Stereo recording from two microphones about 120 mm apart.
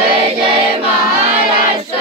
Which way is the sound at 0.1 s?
55° right (ahead or behind).